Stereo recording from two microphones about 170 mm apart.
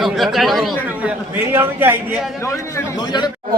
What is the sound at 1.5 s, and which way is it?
Speech, 15° right (ahead or behind).